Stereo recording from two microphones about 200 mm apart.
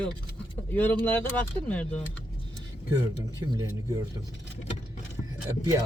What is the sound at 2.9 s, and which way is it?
Speech, 20° right (ahead or behind).